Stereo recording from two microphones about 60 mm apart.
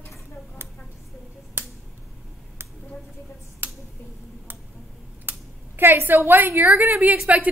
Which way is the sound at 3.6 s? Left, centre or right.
Right.